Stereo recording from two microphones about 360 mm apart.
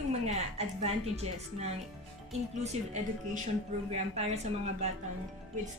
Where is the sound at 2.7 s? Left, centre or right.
Centre.